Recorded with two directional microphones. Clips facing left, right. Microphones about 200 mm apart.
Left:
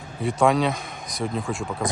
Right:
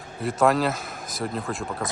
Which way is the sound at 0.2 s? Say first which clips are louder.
Left 1 dB; centre (ahead or behind).